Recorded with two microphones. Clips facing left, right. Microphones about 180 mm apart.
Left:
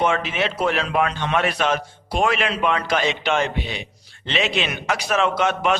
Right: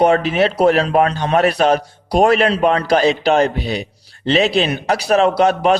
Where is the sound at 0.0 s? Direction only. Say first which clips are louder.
Right 8 dB; 40° right (ahead or behind).